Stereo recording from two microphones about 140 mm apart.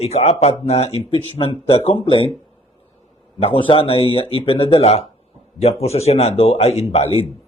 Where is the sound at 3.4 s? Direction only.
40° left (ahead or behind).